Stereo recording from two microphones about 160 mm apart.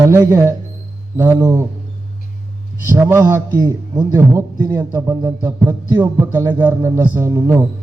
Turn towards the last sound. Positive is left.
turn(degrees=-15)  # may be behind; listen again after turning